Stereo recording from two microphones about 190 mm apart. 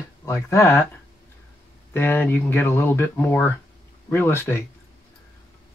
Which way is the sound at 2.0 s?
10° left (ahead or behind).